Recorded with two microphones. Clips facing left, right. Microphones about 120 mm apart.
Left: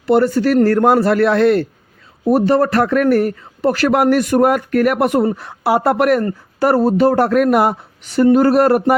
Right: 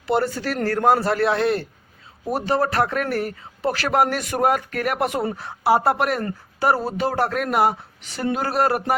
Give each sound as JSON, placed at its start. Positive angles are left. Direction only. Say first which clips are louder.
{"t": 0.0, "sound": "speech", "louder": "left 9 dB", "side_deg": 55}
{"t": 6.7, "sound": "speech", "louder": "left 10 dB", "side_deg": 45}